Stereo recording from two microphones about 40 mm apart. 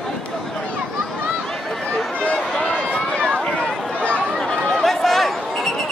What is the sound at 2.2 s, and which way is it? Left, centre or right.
Run, left.